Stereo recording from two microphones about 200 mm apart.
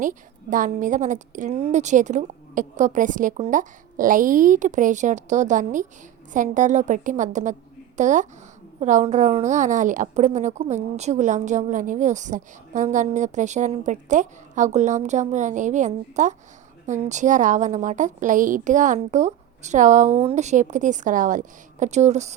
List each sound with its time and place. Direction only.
0.0 s a woman's voice: 40° right (ahead or behind)